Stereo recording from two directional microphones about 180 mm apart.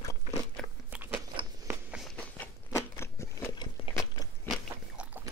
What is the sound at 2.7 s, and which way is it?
Biting, 15° left (ahead or behind).